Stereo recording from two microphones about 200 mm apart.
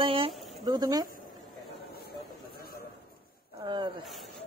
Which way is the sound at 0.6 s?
20° right (ahead or behind).